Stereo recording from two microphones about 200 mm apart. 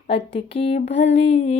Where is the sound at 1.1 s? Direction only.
35° left (ahead or behind).